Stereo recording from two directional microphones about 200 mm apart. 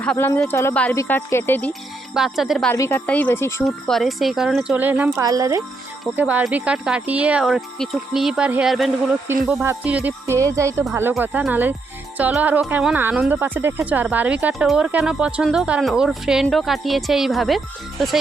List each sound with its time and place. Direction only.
0.0 s a woman's voice: 10° left (ahead or behind)
2.1 s speech: centre (ahead or behind)
2.7 s a woman's voice: 15° left (ahead or behind)
3.9 s speech: centre (ahead or behind)